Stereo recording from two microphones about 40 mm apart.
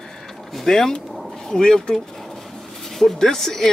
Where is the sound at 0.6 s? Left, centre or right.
Centre.